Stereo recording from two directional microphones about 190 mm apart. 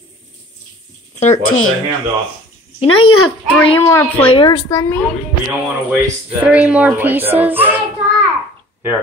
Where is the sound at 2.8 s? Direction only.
30° left (ahead or behind).